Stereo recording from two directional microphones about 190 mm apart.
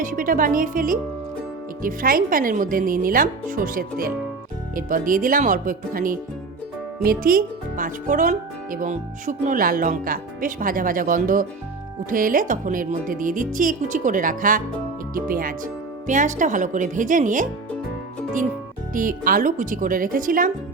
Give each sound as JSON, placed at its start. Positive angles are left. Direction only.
{"t": 0.0, "sound": "speech", "side_deg": -45}
{"t": 18.9, "sound": "speech", "side_deg": -45}